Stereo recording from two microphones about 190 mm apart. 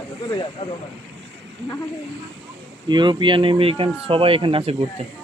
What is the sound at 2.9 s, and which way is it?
Speech, 25° right (ahead or behind).